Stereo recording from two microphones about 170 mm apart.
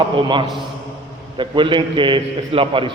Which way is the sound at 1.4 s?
30° right (ahead or behind).